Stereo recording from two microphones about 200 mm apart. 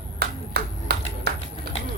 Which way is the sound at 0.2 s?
55° right (ahead or behind).